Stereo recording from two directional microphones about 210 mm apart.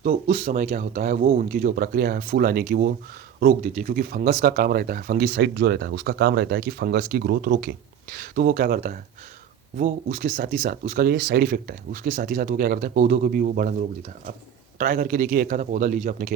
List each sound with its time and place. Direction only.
0.0 s speech: 45° right (ahead or behind)
14.8 s speech: 45° right (ahead or behind)